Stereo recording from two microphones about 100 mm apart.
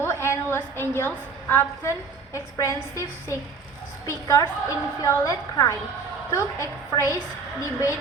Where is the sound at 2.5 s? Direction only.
35° left (ahead or behind).